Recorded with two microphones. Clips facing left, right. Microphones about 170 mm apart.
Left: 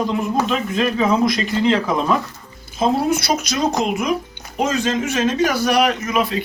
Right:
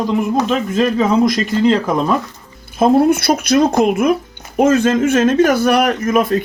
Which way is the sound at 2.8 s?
55° right (ahead or behind).